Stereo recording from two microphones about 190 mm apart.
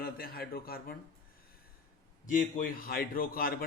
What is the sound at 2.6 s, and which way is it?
Speech, 50° left (ahead or behind).